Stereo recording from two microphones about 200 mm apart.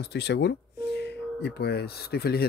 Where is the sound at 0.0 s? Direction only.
55° left (ahead or behind).